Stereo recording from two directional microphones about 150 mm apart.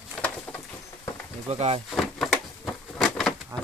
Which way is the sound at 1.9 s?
Centre (ahead or behind).